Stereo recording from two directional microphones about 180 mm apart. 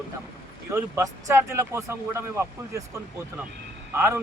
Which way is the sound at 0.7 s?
15° right (ahead or behind).